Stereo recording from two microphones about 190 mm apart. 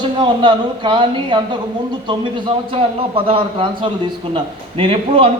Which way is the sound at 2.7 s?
30° right (ahead or behind).